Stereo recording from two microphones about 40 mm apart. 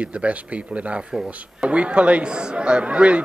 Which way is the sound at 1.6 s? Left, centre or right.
Right.